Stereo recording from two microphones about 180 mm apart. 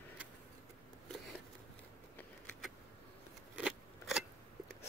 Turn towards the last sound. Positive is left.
turn(degrees=-5)  # may be behind; listen again after turning